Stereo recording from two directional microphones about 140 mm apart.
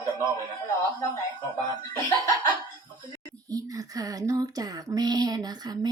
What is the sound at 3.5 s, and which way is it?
A woman's voice, 25° right (ahead or behind).